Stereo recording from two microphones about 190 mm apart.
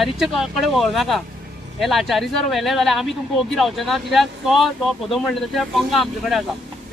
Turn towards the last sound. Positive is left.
turn(degrees=0)  # may be behind; listen again after turning